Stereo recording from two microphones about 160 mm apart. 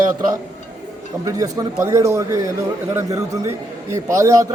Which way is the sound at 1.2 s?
20° right (ahead or behind).